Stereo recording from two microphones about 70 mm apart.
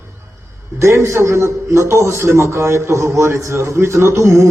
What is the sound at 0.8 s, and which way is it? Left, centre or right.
A man's voice, right.